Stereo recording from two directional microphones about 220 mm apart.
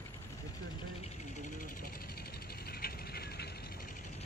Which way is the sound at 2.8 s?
45° left (ahead or behind).